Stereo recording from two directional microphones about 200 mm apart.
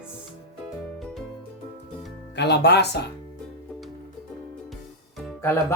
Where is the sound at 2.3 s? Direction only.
60° left (ahead or behind).